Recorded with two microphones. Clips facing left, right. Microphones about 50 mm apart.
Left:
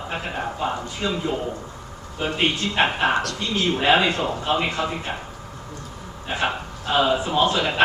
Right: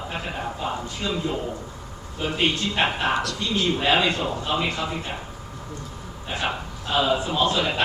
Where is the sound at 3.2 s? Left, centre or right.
Left.